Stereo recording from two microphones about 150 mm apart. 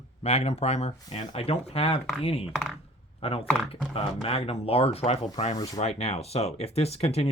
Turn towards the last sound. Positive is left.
turn(degrees=45)  # may be behind; listen again after turning